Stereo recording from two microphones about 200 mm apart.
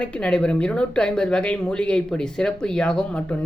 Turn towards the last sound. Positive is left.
turn(degrees=5)  # may be behind; listen again after turning